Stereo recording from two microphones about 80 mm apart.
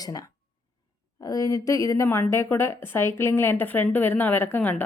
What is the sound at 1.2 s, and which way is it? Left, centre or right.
A woman's voice, left.